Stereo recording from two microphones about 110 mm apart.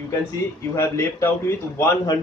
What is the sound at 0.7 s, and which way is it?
A man's voice, 25° left (ahead or behind).